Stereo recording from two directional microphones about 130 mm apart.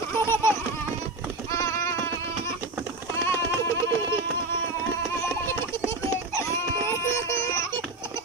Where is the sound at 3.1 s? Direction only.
20° left (ahead or behind).